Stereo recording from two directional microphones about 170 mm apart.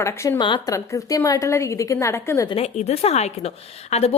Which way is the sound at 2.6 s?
40° left (ahead or behind).